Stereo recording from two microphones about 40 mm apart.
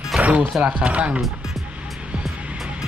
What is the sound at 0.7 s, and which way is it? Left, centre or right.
Speech, right.